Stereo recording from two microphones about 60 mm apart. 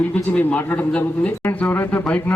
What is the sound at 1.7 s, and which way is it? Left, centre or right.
Speech, left.